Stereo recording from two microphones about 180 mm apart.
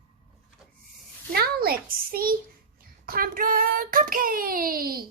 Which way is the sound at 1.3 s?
55° right (ahead or behind).